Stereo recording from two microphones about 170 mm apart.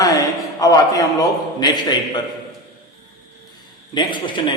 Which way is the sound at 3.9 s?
30° left (ahead or behind).